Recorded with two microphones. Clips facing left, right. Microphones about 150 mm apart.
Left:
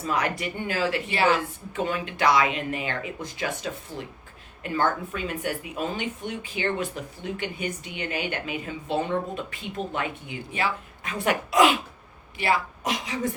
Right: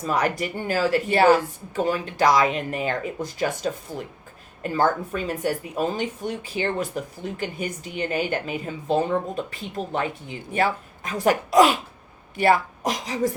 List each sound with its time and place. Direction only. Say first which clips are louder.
0.0 s speech: right 3 dB; 40° right (ahead or behind)